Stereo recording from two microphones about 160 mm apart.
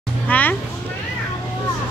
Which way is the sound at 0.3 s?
10° left (ahead or behind).